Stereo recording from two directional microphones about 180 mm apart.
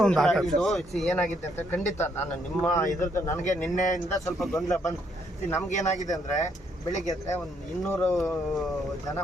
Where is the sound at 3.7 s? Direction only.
45° left (ahead or behind).